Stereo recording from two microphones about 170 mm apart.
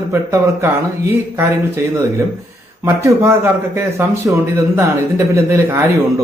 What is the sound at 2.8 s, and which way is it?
Speech, 15° right (ahead or behind).